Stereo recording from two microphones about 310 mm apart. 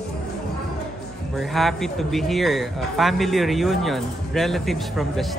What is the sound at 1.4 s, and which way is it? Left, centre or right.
Speech, centre.